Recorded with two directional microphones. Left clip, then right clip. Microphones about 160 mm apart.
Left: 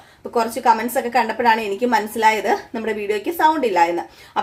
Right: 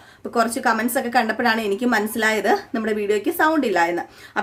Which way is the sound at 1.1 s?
30° right (ahead or behind).